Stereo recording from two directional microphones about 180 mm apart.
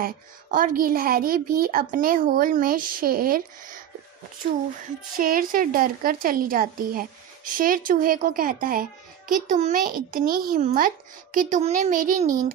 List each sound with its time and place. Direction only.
0.0 s a child's voice: 50° right (ahead or behind)
5.1 s a child's voice: 50° right (ahead or behind)